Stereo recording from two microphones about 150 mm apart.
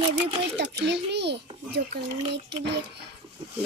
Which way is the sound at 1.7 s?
90° right.